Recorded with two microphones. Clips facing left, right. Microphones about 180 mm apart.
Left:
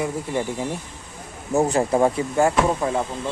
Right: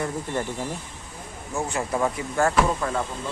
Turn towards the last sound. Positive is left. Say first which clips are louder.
# left 3 dB
turn(degrees=20)  # may be behind; listen again after turning